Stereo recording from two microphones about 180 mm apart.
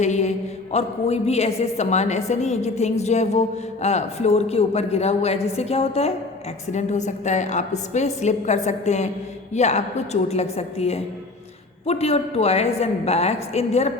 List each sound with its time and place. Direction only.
0.0 s a woman's voice: 40° left (ahead or behind)